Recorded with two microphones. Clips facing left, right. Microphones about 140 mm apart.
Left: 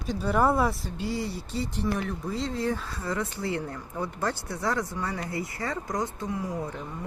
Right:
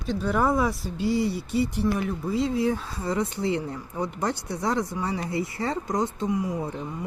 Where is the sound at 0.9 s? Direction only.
15° right (ahead or behind).